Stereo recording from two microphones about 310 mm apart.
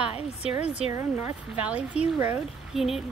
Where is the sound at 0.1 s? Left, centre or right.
Centre.